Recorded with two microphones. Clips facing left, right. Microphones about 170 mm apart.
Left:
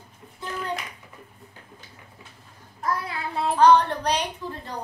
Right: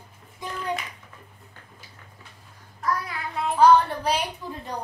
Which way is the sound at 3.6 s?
5° right (ahead or behind).